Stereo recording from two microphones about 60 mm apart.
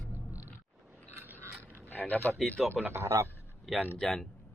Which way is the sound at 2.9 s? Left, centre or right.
Right.